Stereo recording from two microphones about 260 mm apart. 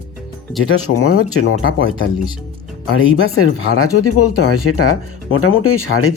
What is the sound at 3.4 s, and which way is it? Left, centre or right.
Speech, left.